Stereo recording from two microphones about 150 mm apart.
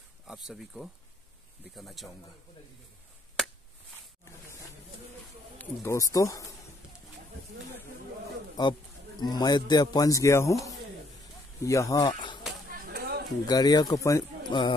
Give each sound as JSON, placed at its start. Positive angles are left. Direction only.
{"t": 0.3, "sound": "speech", "side_deg": 0}
{"t": 4.2, "sound": "wild animals", "side_deg": 20}
{"t": 5.6, "sound": "a man's voice", "side_deg": 15}
{"t": 8.6, "sound": "a man's voice", "side_deg": 25}
{"t": 12.6, "sound": "a sound", "side_deg": -75}
{"t": 13.5, "sound": "a man's voice", "side_deg": 25}
{"t": 14.5, "sound": "speech", "side_deg": 30}